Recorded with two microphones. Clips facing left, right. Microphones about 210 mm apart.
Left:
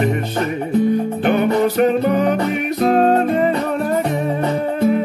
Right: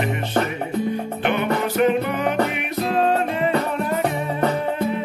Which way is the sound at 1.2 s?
40° left (ahead or behind).